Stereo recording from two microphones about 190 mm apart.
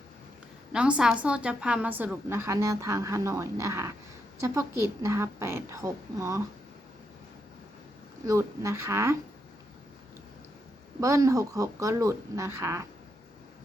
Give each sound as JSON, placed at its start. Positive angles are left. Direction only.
{"t": 0.7, "sound": "a woman's voice", "side_deg": -5}
{"t": 8.3, "sound": "a woman's voice", "side_deg": -15}
{"t": 11.0, "sound": "a woman's voice", "side_deg": -15}